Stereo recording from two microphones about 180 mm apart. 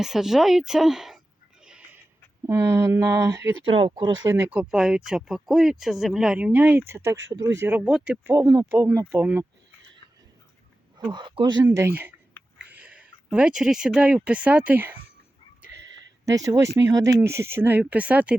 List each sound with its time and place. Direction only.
0.0 s a woman's voice: centre (ahead or behind)
2.5 s speech: 15° right (ahead or behind)
3.6 s speech: 30° right (ahead or behind); by 9.5 s 10° right (ahead or behind)
11.1 s speech: 25° right (ahead or behind); by 14.9 s 10° right (ahead or behind)
15.7 s a sound: 85° right
16.2 s speech: 20° right (ahead or behind)